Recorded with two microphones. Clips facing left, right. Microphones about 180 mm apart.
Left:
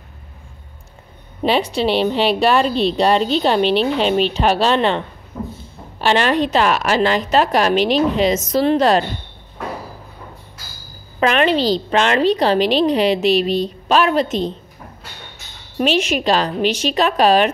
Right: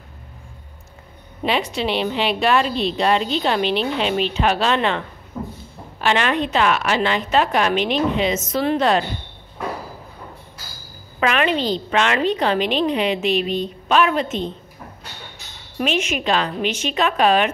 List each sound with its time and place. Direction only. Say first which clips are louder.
1.4 s a woman's voice: left 4 dB; 30° left (ahead or behind)
11.1 s a woman's voice: left 4 dB; 35° left (ahead or behind)
15.8 s a woman's voice: left 4 dB; 35° left (ahead or behind)